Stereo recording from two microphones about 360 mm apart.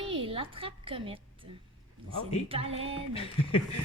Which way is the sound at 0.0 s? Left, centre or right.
Centre.